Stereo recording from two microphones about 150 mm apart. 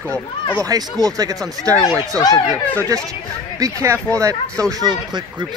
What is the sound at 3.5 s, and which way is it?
Speech, 20° right (ahead or behind).